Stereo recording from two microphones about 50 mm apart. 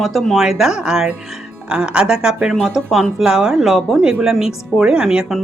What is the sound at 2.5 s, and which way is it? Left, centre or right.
Speech, centre.